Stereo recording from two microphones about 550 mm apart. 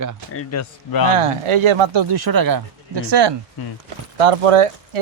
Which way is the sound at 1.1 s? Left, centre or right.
Right.